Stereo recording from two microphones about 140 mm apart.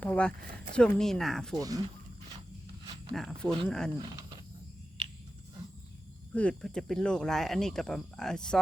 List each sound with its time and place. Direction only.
0.0 s a sound: 10° left (ahead or behind)
0.8 s speech: 5° left (ahead or behind)
1.5 s speech: 25° right (ahead or behind)
3.1 s speech: 5° left (ahead or behind)
6.3 s speech: 5° left (ahead or behind)